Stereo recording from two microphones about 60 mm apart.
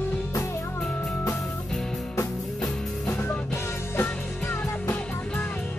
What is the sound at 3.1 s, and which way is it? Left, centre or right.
Music, left.